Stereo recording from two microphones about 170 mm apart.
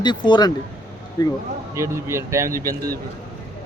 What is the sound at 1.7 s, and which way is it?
A man's voice, 15° right (ahead or behind).